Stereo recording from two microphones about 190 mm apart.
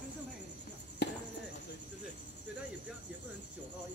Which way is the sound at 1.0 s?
60° left (ahead or behind).